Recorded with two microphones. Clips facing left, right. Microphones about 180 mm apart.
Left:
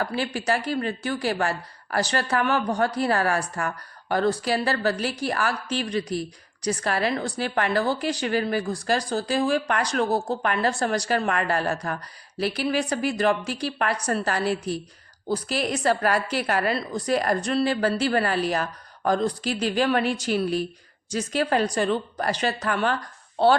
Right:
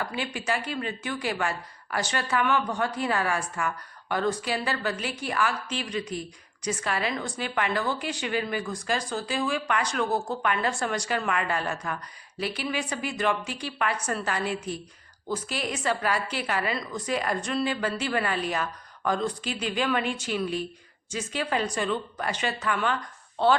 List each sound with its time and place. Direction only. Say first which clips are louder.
0.0 s speech: left 5 dB; 35° left (ahead or behind)